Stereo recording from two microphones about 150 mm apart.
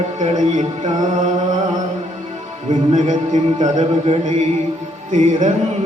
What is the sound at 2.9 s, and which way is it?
Music, 55° right (ahead or behind).